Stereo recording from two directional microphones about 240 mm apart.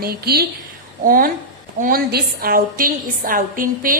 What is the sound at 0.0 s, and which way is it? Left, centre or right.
A woman's voice, right.